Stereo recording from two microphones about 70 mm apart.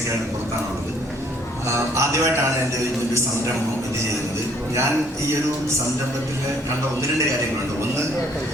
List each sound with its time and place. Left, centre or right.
1.6 s a man's voice: right